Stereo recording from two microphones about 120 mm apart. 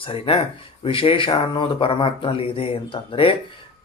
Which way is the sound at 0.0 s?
50° left (ahead or behind).